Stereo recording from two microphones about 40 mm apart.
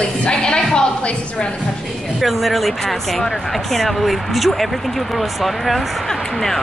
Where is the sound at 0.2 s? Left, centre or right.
Left.